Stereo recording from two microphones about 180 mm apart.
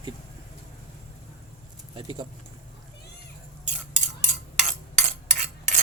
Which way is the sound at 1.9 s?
30° right (ahead or behind).